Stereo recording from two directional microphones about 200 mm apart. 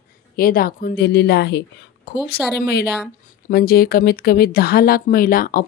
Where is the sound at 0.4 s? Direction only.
45° left (ahead or behind).